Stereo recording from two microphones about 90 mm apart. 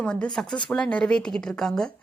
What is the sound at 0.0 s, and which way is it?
A woman's voice, 10° left (ahead or behind).